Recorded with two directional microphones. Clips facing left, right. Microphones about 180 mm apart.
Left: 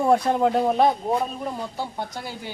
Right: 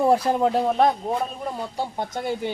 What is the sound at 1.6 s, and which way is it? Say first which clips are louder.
Speech: right 2 dB; 20° right (ahead or behind).